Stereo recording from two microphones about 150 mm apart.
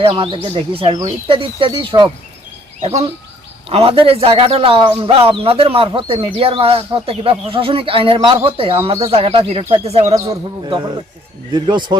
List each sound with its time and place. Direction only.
0.0 s speech: 35° right (ahead or behind)
10.2 s speech: 30° right (ahead or behind)